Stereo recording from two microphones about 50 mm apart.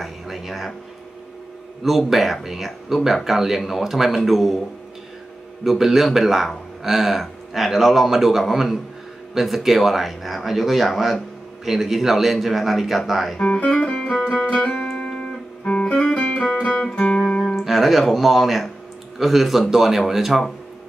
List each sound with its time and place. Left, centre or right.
0.0 s a sound: centre
1.8 s a man's voice: centre
5.6 s a man's voice: centre
13.4 s speech: centre
14.8 s music: centre
17.6 s a man's voice: centre